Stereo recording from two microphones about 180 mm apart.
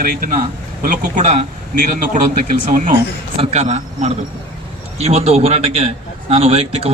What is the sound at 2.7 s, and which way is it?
Speech, 50° right (ahead or behind).